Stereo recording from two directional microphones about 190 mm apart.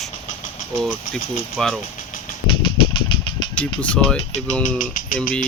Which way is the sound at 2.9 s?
25° left (ahead or behind).